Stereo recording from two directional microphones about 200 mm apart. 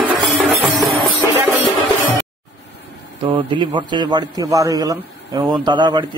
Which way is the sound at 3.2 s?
25° right (ahead or behind).